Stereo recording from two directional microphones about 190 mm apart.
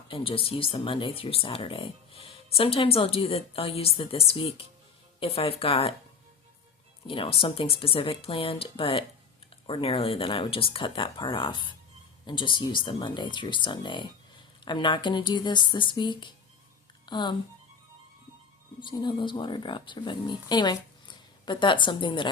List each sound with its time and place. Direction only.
0.1 s a woman's voice: 30° left (ahead or behind)
7.1 s speech: 30° left (ahead or behind)
18.8 s speech: 25° left (ahead or behind)